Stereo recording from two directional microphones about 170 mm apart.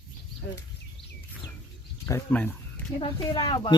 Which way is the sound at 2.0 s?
15° left (ahead or behind).